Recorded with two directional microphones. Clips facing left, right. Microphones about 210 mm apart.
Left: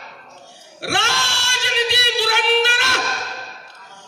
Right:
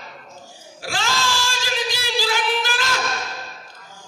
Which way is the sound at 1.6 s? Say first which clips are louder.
Left 4 dB; 70° left (ahead or behind).